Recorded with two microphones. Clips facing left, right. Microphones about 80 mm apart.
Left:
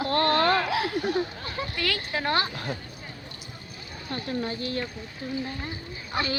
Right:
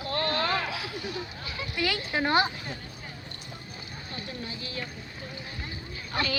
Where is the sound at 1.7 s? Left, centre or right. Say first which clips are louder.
Right 3 dB; centre.